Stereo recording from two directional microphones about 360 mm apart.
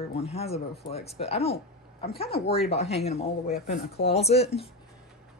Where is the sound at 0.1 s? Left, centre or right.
Centre.